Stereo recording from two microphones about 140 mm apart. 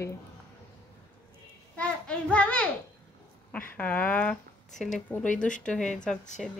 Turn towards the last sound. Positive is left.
turn(degrees=5)  # may be behind; listen again after turning